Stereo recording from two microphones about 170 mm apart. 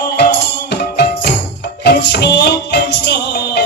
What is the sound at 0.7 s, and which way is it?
Music, 70° left (ahead or behind).